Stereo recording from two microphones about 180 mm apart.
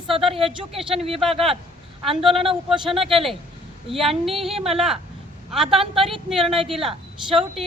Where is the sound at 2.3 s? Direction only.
30° right (ahead or behind).